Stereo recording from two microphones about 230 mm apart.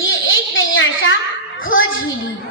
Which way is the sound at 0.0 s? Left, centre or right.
Left.